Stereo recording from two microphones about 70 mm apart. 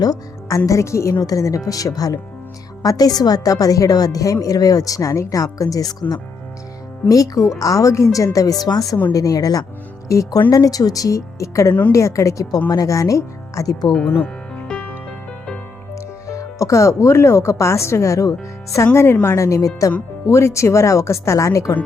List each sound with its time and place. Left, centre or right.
0.0 s speech: left
1.1 s speech: left
1.4 s a woman's voice: left
7.1 s a woman's voice: left
10.1 s speech: left
10.5 s a woman's voice: left
12.5 s speech: left
14.0 s speech: left
16.2 s speech: left